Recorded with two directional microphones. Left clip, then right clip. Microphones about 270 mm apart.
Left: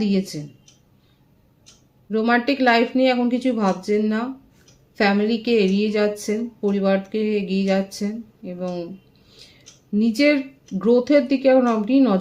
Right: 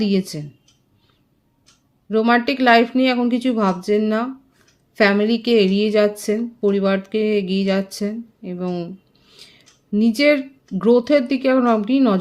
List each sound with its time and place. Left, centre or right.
0.0 s a woman's voice: right
2.0 s a woman's voice: right